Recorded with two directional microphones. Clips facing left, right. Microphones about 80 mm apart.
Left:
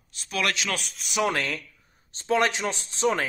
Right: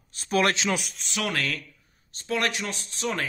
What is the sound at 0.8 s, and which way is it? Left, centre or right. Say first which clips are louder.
Speech: even; centre.